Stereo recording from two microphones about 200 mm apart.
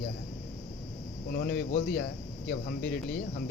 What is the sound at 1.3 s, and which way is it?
Speech, 50° left (ahead or behind).